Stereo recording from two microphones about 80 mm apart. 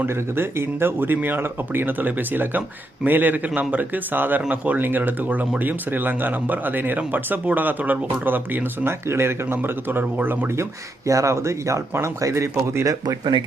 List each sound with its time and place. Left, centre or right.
0.0 s speech: right
11.0 s speech: right